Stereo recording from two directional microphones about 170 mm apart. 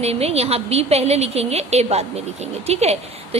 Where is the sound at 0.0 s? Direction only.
35° right (ahead or behind).